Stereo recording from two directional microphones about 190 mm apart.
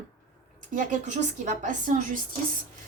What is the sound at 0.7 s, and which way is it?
A woman's voice, 40° right (ahead or behind).